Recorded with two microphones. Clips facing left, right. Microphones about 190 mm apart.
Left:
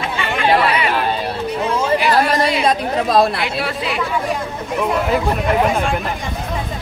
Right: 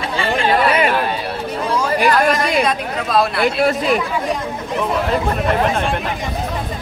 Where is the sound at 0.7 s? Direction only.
45° right (ahead or behind).